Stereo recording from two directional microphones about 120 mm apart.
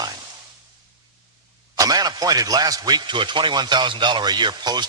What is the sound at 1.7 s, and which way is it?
A man's voice, 30° right (ahead or behind).